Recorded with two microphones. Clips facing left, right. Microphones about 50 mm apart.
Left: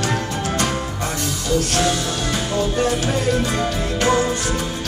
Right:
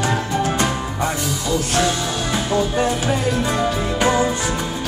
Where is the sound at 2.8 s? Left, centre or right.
Centre.